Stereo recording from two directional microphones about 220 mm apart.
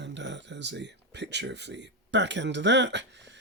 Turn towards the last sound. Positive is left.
turn(degrees=-55)  # may be behind; listen again after turning